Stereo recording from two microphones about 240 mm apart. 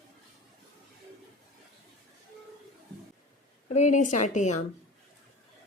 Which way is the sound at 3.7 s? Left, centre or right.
Left.